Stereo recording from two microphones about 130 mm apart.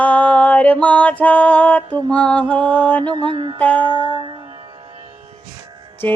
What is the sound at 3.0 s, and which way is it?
Mantra, 40° right (ahead or behind).